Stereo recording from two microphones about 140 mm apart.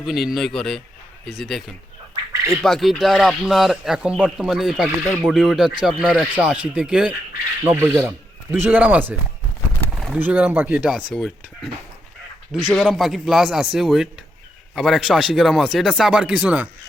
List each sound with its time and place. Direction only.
0.0 s speech: 5° right (ahead or behind)
7.6 s speech: 15° right (ahead or behind)
9.9 s a sound: centre (ahead or behind)
10.2 s speech: 10° right (ahead or behind)
10.9 s speech: centre (ahead or behind)